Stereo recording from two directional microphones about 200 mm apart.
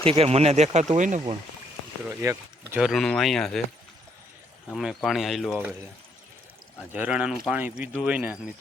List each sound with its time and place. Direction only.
0.0 s speech: 30° right (ahead or behind)
2.0 s speech: 10° right (ahead or behind)
4.7 s speech: centre (ahead or behind)
6.9 s speech: 5° right (ahead or behind)